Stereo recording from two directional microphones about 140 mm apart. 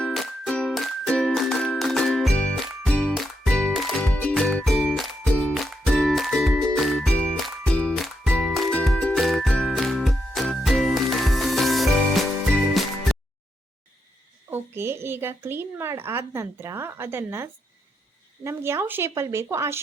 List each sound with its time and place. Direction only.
0.0 s music: centre (ahead or behind)
14.5 s a woman's voice: 15° right (ahead or behind)